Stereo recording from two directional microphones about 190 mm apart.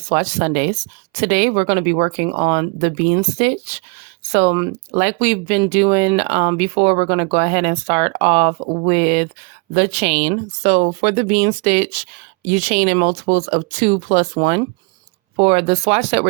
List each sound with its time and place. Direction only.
0.0 s speech: 35° right (ahead or behind)